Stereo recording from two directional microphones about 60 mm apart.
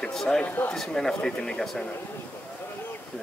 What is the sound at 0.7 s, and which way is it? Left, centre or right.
Speech, centre.